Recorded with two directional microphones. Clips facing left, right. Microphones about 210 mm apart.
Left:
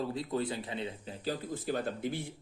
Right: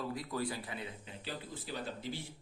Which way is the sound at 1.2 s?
45° left (ahead or behind).